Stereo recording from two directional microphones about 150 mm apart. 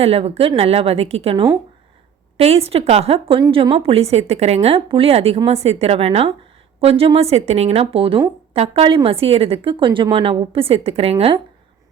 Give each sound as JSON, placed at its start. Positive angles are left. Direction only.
{"t": 0.0, "sound": "a woman's voice", "side_deg": -40}